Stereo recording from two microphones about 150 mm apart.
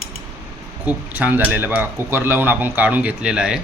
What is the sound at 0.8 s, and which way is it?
Speech, 10° right (ahead or behind).